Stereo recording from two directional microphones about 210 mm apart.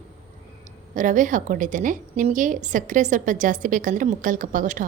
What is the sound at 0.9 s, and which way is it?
A woman's voice, 35° right (ahead or behind).